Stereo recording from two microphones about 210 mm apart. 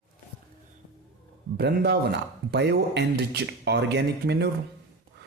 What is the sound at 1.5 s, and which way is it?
Speech, 50° right (ahead or behind).